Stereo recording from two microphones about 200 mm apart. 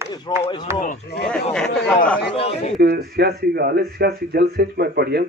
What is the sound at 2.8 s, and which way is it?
Speech, 50° right (ahead or behind).